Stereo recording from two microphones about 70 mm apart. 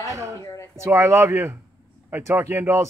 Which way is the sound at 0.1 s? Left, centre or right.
Right.